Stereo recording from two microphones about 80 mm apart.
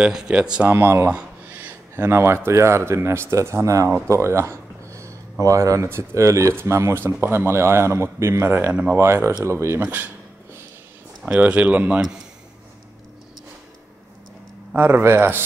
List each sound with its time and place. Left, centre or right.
0.0 s speech: centre
0.7 s speech: right
4.1 s a sound: right
5.4 s speech: right
9.8 s speech: right
11.2 s speech: centre
14.8 s speech: right